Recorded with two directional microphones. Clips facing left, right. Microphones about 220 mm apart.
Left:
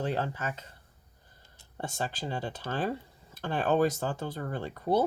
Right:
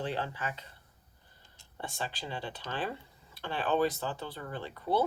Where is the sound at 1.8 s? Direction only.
45° left (ahead or behind).